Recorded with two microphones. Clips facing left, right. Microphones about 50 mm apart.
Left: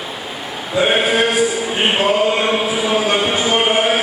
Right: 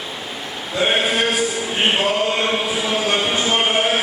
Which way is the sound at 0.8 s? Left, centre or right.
Centre.